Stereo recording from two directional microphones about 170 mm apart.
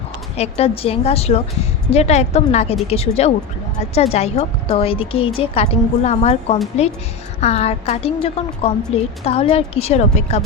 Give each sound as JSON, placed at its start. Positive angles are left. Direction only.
{"t": 0.3, "sound": "speech", "side_deg": 40}